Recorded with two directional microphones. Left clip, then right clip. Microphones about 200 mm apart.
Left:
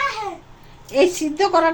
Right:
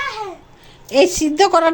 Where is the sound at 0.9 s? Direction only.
50° right (ahead or behind).